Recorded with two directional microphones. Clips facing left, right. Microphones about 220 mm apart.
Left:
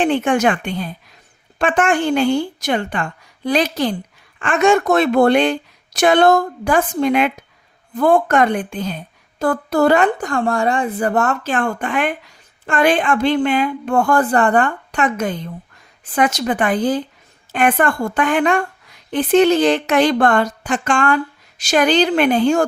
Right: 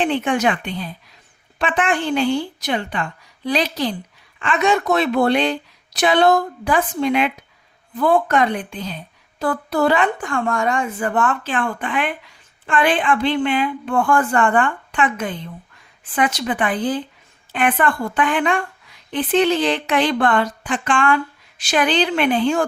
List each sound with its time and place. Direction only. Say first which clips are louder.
0.0 s a woman's voice: left 3 dB; 45° left (ahead or behind)